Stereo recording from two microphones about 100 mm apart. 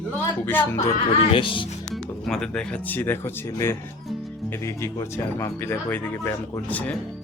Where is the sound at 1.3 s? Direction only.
60° left (ahead or behind).